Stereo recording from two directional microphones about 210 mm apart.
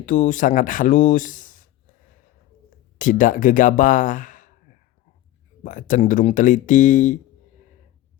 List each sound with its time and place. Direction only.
0.0 s speech: 40° left (ahead or behind)
3.0 s speech: 40° left (ahead or behind)